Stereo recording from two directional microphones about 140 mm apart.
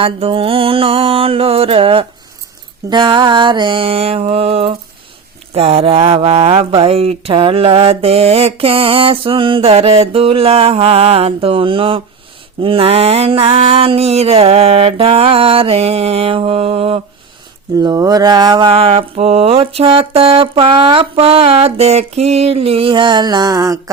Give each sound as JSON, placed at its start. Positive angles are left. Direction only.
{"t": 0.0, "sound": "mantra", "side_deg": -40}
{"t": 5.5, "sound": "speech", "side_deg": -45}
{"t": 17.7, "sound": "mantra", "side_deg": -25}